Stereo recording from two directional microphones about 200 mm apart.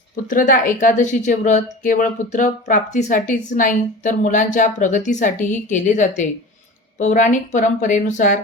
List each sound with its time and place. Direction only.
0.3 s speech: 40° left (ahead or behind)